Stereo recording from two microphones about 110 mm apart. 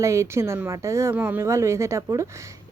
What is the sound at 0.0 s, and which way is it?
Speech, 25° right (ahead or behind).